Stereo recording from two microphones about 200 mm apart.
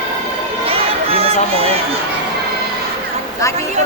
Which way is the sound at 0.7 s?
30° right (ahead or behind).